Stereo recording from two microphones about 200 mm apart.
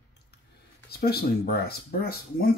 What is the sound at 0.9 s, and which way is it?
Speech, 50° left (ahead or behind).